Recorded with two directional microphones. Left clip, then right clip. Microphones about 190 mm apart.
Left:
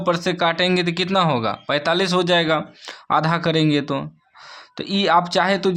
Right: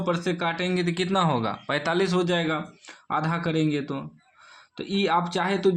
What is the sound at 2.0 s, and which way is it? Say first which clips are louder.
Speech: left 6 dB; 30° left (ahead or behind).